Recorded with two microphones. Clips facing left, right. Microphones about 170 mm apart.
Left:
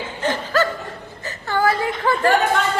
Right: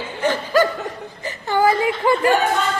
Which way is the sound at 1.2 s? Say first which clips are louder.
Right 2 dB; 15° right (ahead or behind).